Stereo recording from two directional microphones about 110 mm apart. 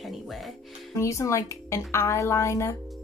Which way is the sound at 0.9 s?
30° left (ahead or behind).